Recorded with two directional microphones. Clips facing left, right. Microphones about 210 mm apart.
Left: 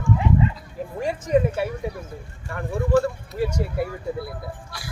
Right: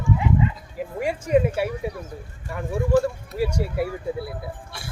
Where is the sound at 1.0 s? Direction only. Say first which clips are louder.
Even; 10° right (ahead or behind).